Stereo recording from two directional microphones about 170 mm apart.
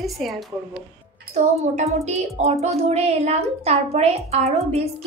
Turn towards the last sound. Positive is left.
turn(degrees=-40)  # may be behind; listen again after turning